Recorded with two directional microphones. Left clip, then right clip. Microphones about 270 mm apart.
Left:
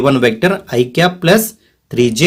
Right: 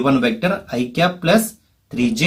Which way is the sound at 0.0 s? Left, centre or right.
Left.